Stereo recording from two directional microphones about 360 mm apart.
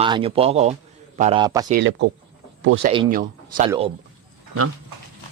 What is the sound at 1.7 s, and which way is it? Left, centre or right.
Speech, right.